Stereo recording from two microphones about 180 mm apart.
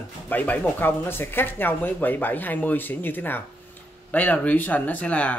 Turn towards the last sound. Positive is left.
turn(degrees=5)  # may be behind; listen again after turning